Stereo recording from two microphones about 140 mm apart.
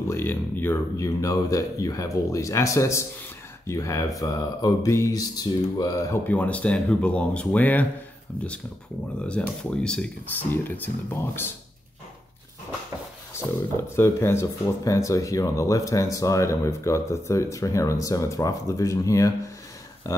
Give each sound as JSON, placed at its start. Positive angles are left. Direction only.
{"t": 0.1, "sound": "speech", "side_deg": 15}
{"t": 6.2, "sound": "speech", "side_deg": 10}
{"t": 9.2, "sound": "speech", "side_deg": 10}
{"t": 13.9, "sound": "speech", "side_deg": 20}